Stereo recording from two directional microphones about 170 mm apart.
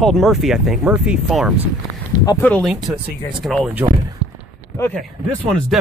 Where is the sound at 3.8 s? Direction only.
15° right (ahead or behind).